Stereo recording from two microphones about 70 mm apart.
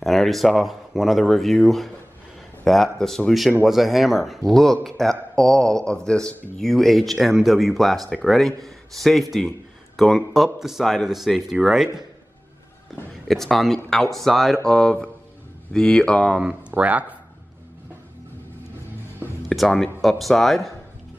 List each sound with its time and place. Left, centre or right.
0.0 s speech: centre
13.3 s speech: centre
16.3 s speech: centre
19.5 s speech: centre